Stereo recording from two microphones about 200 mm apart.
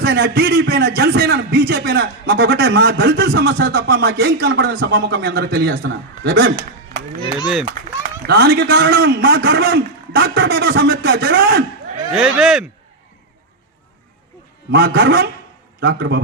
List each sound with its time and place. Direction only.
0.0 s a man's voice: 55° right (ahead or behind)
7.3 s speech: 5° right (ahead or behind)
8.3 s a man's voice: 55° right (ahead or behind)
12.1 s speech: 5° right (ahead or behind)
14.7 s a man's voice: 55° right (ahead or behind)